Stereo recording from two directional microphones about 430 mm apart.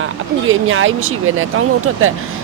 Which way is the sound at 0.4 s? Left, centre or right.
Right.